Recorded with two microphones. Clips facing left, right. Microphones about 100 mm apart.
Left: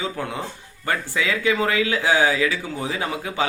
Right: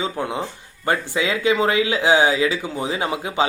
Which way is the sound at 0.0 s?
20° right (ahead or behind).